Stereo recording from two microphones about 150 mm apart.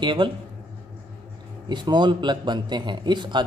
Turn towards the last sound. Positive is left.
turn(degrees=-30)  # may be behind; listen again after turning